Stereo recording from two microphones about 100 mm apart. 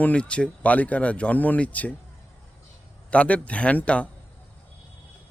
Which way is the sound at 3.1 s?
15° left (ahead or behind).